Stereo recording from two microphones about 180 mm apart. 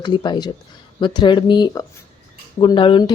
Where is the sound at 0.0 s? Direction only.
25° left (ahead or behind).